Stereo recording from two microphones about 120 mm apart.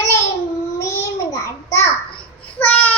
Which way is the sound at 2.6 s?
15° left (ahead or behind).